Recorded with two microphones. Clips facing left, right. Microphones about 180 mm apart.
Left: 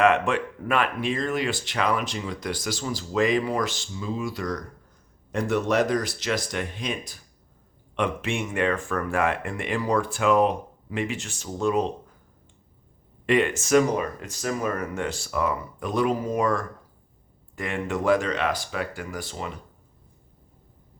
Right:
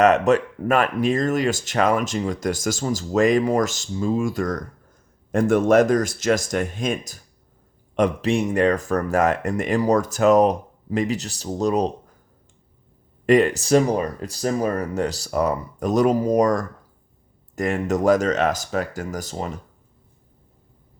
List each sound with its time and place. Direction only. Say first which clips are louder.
0.0 s speech: right 5 dB; 40° right (ahead or behind)
13.2 s speech: right 6 dB; 40° right (ahead or behind)